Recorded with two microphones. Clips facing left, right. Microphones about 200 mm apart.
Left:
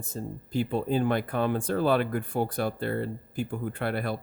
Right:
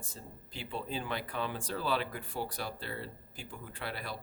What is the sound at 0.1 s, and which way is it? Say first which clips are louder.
Speech: left 15 dB; 45° left (ahead or behind).